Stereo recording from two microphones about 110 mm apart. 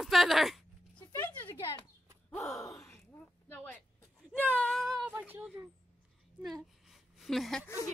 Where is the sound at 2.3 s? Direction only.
Centre (ahead or behind).